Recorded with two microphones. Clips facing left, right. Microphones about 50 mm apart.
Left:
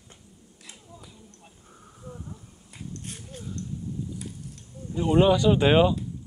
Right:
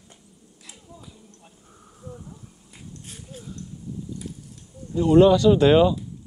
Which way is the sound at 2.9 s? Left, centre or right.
Left.